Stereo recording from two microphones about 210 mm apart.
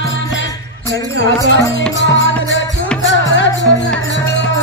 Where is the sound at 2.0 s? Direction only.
60° left (ahead or behind).